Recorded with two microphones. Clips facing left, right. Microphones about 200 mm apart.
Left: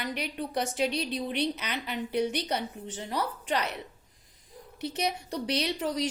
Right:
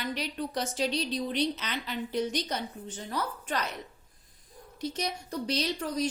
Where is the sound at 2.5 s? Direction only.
75° left (ahead or behind).